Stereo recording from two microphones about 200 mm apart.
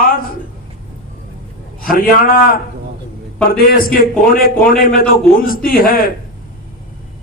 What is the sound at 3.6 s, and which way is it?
A man's voice, 45° left (ahead or behind).